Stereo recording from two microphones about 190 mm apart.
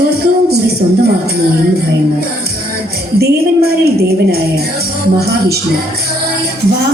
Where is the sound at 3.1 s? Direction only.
55° right (ahead or behind).